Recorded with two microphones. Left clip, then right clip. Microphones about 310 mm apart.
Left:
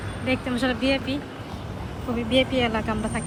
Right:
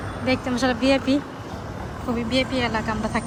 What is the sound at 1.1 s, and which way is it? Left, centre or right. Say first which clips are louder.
Speech: right 7 dB; centre.